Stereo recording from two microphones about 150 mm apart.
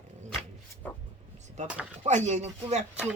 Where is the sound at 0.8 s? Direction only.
10° left (ahead or behind).